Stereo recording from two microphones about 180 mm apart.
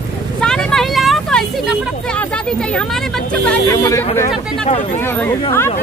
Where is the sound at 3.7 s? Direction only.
15° left (ahead or behind).